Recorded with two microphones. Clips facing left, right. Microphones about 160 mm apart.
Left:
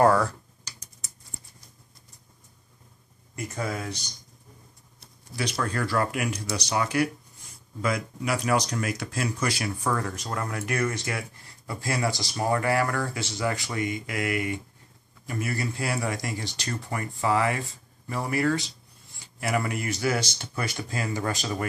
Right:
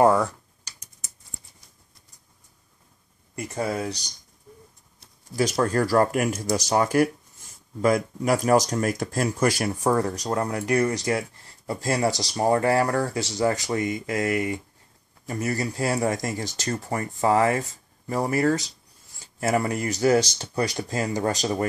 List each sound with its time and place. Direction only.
0.0 s computer keyboard: 15° right (ahead or behind)
3.4 s speech: 30° right (ahead or behind)
5.3 s speech: 45° right (ahead or behind)
9.8 s speech: 35° right (ahead or behind)